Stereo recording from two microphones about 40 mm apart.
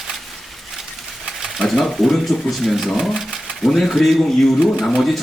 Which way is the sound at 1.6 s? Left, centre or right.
Centre.